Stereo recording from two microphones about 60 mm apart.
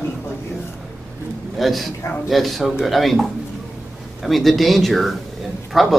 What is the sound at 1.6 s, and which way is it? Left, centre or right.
Speech, centre.